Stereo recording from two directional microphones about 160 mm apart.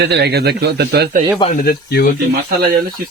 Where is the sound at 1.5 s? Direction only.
70° left (ahead or behind).